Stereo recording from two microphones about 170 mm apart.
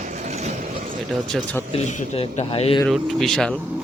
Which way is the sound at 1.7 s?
40° left (ahead or behind).